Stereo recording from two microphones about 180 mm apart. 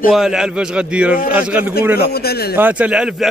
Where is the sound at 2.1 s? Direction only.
60° left (ahead or behind).